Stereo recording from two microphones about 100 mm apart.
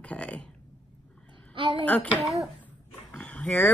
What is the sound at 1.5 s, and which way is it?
Speech, 55° right (ahead or behind).